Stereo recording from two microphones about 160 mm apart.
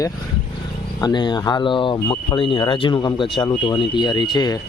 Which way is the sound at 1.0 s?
25° left (ahead or behind).